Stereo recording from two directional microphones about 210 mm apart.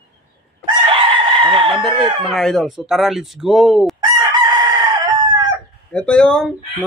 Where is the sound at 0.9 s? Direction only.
25° right (ahead or behind).